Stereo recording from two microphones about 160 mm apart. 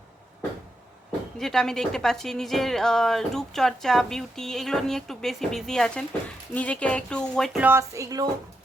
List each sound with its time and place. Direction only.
1.4 s a woman's voice: centre (ahead or behind)
7.6 s speech: 15° right (ahead or behind)